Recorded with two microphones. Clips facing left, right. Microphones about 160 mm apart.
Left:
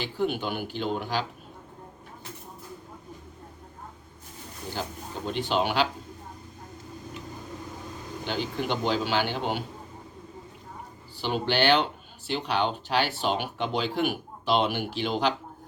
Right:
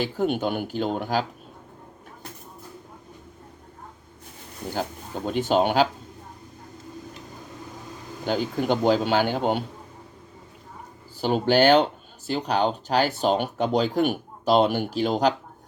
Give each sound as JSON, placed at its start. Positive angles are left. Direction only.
{"t": 0.0, "sound": "speech", "side_deg": -45}
{"t": 4.7, "sound": "speech", "side_deg": -50}
{"t": 8.2, "sound": "speech", "side_deg": -45}
{"t": 11.2, "sound": "speech", "side_deg": -45}